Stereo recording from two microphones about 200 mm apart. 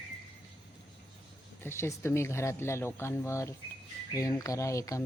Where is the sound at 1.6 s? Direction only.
10° left (ahead or behind).